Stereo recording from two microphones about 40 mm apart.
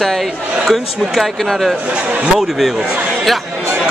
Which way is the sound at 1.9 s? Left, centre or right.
Right.